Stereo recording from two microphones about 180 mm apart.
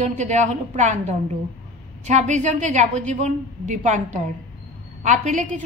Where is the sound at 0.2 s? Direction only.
40° right (ahead or behind).